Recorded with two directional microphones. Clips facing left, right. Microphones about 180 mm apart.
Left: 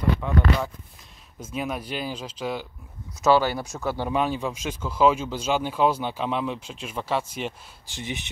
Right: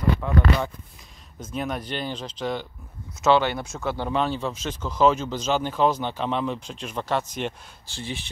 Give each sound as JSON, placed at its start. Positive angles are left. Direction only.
{"t": 0.2, "sound": "speech", "side_deg": 0}
{"t": 1.4, "sound": "speech", "side_deg": 5}
{"t": 7.9, "sound": "speech", "side_deg": 20}